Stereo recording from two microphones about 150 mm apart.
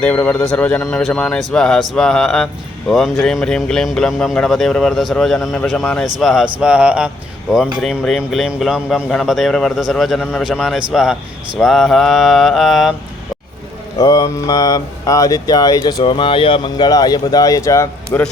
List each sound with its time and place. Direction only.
0.0 s speech: 10° left (ahead or behind)
14.0 s speech: 25° left (ahead or behind)